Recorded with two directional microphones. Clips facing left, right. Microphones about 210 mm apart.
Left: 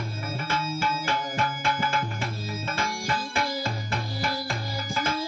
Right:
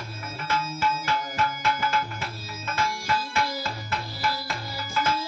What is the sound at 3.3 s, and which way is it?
Tabla, 30° left (ahead or behind).